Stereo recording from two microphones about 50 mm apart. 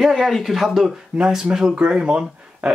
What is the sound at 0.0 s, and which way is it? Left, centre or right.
Speech, centre.